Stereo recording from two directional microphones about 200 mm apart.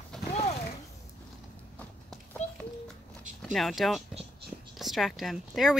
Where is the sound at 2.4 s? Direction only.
35° left (ahead or behind).